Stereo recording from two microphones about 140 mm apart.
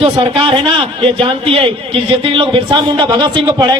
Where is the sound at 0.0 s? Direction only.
40° right (ahead or behind).